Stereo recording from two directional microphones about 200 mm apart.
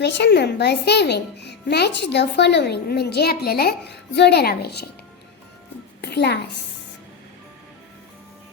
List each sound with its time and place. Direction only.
0.0 s a child's voice: 60° left (ahead or behind)
6.0 s a woman's voice: 55° left (ahead or behind)